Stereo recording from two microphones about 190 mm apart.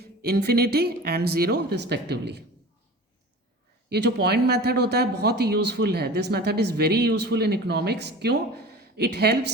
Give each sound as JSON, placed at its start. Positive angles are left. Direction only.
{"t": 0.0, "sound": "speech", "side_deg": -55}
{"t": 3.8, "sound": "speech", "side_deg": -60}